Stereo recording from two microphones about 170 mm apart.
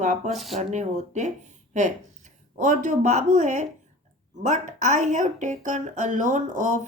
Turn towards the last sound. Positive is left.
turn(degrees=-45)  # may be behind; listen again after turning